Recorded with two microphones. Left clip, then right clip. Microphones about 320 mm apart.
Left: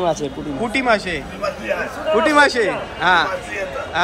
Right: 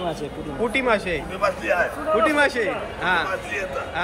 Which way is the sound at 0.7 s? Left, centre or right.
Centre.